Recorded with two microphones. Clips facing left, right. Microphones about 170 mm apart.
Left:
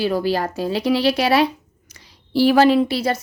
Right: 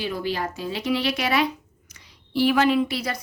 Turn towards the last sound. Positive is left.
turn(degrees=30)  # may be behind; listen again after turning